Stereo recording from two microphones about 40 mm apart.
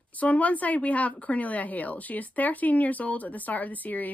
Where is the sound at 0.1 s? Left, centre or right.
Left.